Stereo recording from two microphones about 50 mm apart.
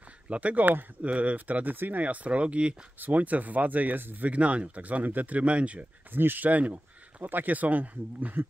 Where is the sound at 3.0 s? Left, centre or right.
Right.